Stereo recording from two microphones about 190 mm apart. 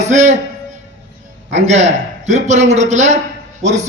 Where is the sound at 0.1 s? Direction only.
40° right (ahead or behind).